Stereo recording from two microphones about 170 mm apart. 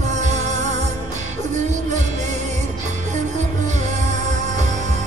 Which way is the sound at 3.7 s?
45° right (ahead or behind).